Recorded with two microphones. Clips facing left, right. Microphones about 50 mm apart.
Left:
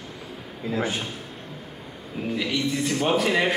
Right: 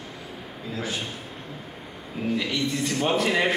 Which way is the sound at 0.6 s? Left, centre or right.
Left.